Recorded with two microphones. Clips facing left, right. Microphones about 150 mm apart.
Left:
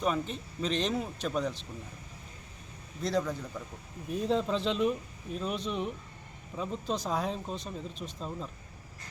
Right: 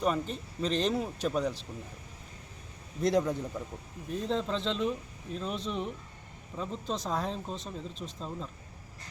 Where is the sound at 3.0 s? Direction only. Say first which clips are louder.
Right 4 dB; 20° right (ahead or behind).